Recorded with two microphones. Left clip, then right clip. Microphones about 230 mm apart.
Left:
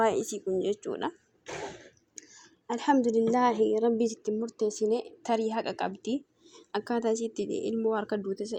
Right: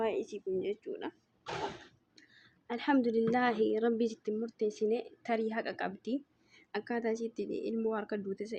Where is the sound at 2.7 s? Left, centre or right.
Centre.